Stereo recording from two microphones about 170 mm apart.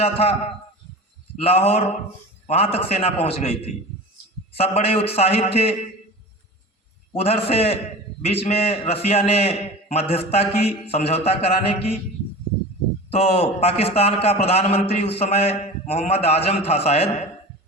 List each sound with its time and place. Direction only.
0.0 s a man's voice: 35° left (ahead or behind)
1.4 s a man's voice: 35° left (ahead or behind)
7.1 s a man's voice: 35° left (ahead or behind)
13.1 s a man's voice: 35° left (ahead or behind)